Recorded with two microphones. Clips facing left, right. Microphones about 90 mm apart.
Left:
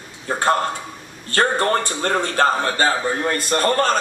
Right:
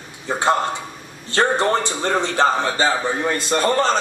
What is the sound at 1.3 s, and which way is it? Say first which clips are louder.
A man's voice: right 1 dB; 20° right (ahead or behind).